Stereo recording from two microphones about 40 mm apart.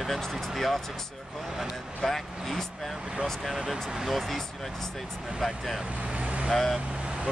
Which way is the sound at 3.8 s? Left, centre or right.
Centre.